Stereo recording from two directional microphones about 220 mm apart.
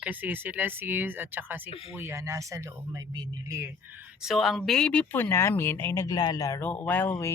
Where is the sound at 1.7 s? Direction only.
25° left (ahead or behind).